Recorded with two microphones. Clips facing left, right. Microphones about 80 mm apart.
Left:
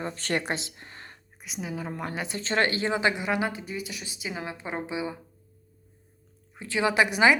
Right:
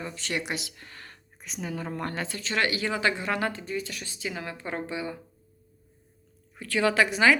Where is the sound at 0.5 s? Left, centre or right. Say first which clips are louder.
Left 2 dB; left.